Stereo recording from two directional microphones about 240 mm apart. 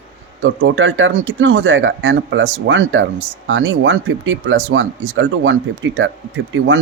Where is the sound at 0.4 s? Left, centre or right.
Right.